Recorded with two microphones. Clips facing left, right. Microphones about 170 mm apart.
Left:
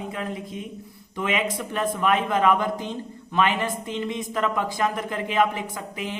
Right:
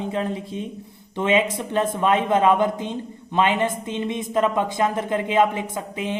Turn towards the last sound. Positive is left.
turn(degrees=-25)  # may be behind; listen again after turning